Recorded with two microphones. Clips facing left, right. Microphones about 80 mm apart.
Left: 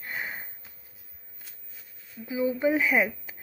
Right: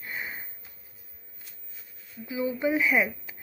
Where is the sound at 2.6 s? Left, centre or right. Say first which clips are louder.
Even; left.